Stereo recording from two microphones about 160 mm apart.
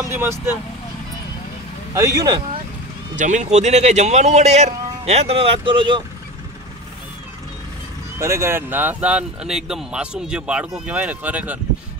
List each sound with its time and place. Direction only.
0.0 s speech: 15° right (ahead or behind)
2.0 s speech: 20° right (ahead or behind)
3.2 s a man's voice: 50° right (ahead or behind); by 6.0 s 30° right (ahead or behind)
8.2 s speech: 15° right (ahead or behind)